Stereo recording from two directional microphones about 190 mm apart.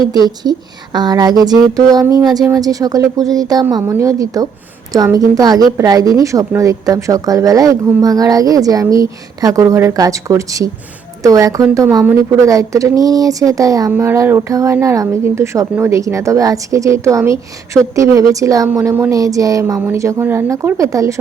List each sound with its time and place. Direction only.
0.9 s speech: 20° right (ahead or behind)